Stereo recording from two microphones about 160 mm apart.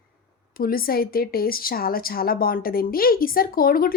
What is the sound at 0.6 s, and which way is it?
A woman's voice, 65° left (ahead or behind).